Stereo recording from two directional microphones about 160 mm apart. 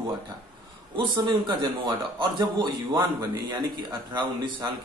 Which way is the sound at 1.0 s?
25° right (ahead or behind).